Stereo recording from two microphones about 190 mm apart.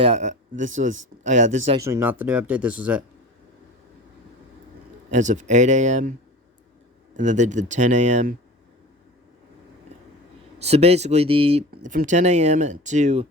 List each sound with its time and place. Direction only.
0.0 s speech: 35° right (ahead or behind)
1.7 s speech: 15° right (ahead or behind)
5.1 s speech: 40° right (ahead or behind)
7.2 s speech: 40° right (ahead or behind)
10.6 s speech: 35° right (ahead or behind)
11.7 s speech: 45° right (ahead or behind)